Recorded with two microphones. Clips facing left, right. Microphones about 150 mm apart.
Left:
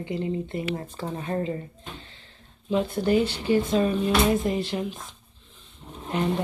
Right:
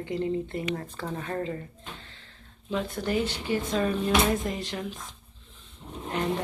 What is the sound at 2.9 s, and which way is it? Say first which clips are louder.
Speech: left 6 dB; 30° left (ahead or behind).